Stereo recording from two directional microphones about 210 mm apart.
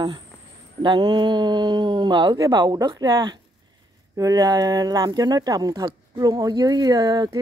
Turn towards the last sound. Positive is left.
turn(degrees=-15)  # may be behind; listen again after turning